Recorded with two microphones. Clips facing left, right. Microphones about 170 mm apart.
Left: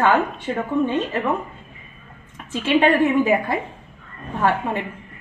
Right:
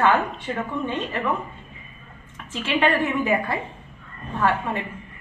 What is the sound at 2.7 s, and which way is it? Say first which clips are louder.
A woman's voice: left 5 dB; 15° left (ahead or behind).